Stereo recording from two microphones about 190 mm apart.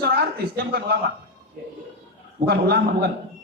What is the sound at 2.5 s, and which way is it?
Speech, 60° right (ahead or behind).